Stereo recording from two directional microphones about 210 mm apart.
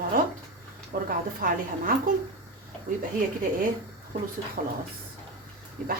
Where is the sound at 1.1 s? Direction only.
40° right (ahead or behind).